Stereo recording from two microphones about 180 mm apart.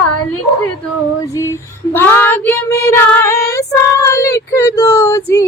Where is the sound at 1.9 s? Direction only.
15° left (ahead or behind).